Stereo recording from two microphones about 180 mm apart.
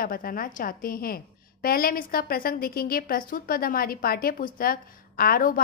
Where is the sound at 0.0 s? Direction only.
55° left (ahead or behind).